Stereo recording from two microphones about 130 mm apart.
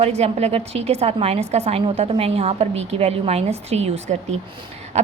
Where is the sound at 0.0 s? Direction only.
55° right (ahead or behind).